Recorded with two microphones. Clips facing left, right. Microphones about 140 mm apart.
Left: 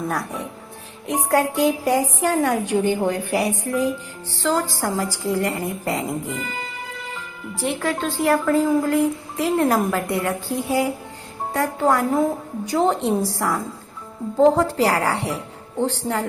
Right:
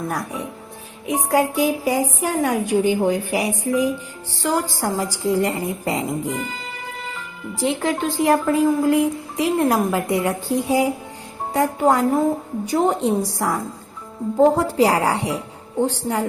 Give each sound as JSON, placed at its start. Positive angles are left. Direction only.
{"t": 0.1, "sound": "a woman's voice", "side_deg": -10}
{"t": 7.6, "sound": "a woman's voice", "side_deg": -20}